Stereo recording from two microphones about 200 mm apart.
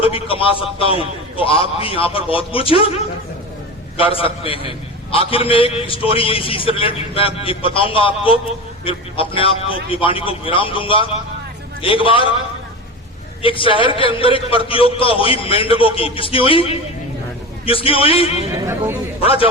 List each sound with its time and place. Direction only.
0.0 s a man's voice: 25° left (ahead or behind)
3.9 s a man's voice: 25° left (ahead or behind)
13.4 s a man's voice: 25° left (ahead or behind)
18.6 s speech: 10° right (ahead or behind)
19.2 s a man's voice: 30° left (ahead or behind)